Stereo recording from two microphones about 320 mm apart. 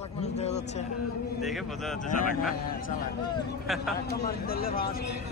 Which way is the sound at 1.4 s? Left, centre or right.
Centre.